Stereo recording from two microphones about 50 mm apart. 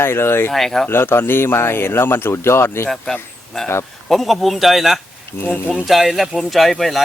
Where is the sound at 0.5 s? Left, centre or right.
Centre.